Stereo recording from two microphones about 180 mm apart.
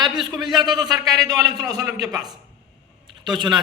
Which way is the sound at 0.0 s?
25° right (ahead or behind).